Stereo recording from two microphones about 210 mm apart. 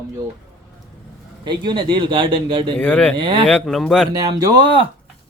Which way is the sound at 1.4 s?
20° right (ahead or behind).